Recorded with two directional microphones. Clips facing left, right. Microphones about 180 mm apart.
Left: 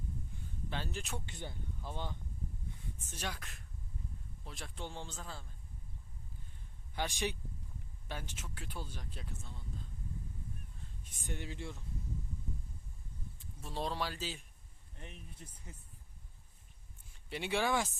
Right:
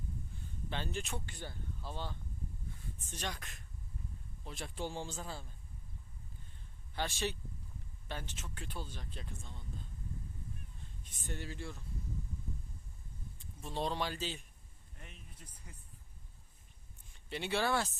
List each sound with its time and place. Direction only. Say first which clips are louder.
0.7 s speech: right 2 dB; 5° left (ahead or behind)
1.2 s speech: left 1 dB; 20° left (ahead or behind); by 5.5 s 5° right (ahead or behind)
6.9 s speech: even; 15° left (ahead or behind)
11.1 s speech: even; 15° left (ahead or behind)
13.4 s speech: right 2 dB; 5° left (ahead or behind)
15.0 s speech: left 5 dB; 30° left (ahead or behind)
17.2 s speech: even; 10° left (ahead or behind)